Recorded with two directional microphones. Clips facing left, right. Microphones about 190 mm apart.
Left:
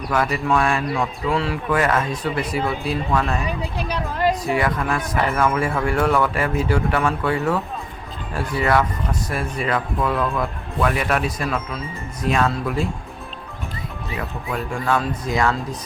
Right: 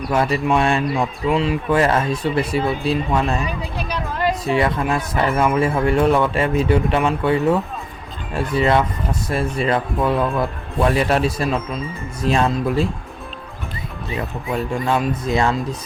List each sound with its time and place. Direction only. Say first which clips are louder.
0.1 s a man's voice: right 2 dB; 25° right (ahead or behind)
1.8 s a man's voice: right 3 dB; 30° right (ahead or behind)
4.4 s a man's voice: right 2 dB; 25° right (ahead or behind)
14.2 s a man's voice: right 4 dB; 25° right (ahead or behind)